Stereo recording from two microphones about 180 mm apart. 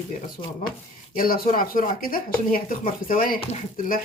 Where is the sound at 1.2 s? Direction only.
50° left (ahead or behind).